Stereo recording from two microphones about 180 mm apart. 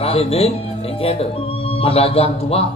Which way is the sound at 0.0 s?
35° left (ahead or behind).